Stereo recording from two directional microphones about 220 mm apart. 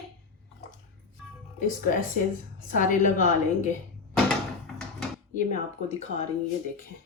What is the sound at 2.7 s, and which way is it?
Speech, 35° left (ahead or behind).